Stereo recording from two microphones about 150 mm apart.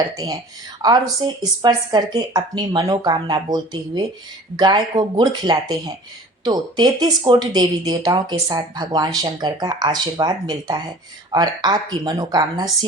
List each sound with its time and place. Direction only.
0.8 s speech: 25° right (ahead or behind)